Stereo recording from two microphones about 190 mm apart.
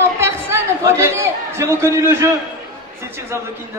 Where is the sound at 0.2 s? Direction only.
15° right (ahead or behind).